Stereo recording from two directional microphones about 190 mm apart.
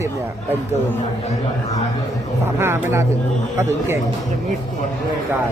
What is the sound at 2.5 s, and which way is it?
Speech, 15° right (ahead or behind).